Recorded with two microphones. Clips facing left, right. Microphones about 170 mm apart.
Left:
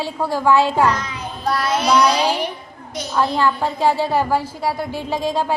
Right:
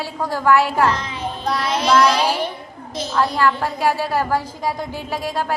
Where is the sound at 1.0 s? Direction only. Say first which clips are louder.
Right 1 dB; 30° right (ahead or behind).